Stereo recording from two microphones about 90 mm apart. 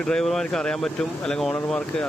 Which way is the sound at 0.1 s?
5° left (ahead or behind).